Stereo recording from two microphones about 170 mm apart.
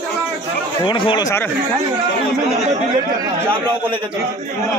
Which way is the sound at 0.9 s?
25° left (ahead or behind).